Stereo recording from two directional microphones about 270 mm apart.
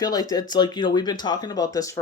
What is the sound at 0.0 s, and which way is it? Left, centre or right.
Speech, centre.